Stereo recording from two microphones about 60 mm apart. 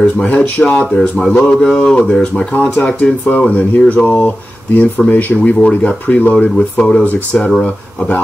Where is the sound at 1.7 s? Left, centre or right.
Centre.